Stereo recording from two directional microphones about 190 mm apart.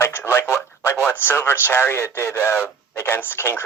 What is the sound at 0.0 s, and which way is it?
Telephone, 10° left (ahead or behind).